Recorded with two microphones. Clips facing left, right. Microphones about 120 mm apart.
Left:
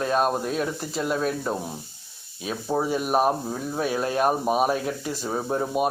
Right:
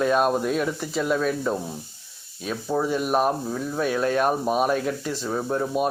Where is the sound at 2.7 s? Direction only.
15° left (ahead or behind).